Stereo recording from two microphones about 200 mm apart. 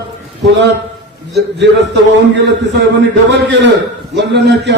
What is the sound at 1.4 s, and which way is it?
A man's voice, 60° right (ahead or behind).